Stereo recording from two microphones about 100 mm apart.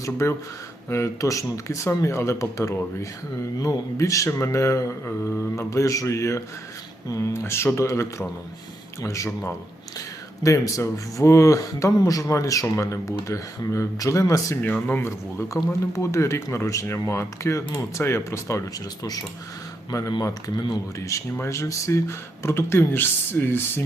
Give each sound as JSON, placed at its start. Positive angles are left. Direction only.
{"t": 0.0, "sound": "speech", "side_deg": 30}
{"t": 10.4, "sound": "speech", "side_deg": 35}
{"t": 14.6, "sound": "speech", "side_deg": 20}